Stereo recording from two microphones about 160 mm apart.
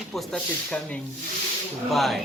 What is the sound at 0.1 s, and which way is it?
Speech, 5° left (ahead or behind).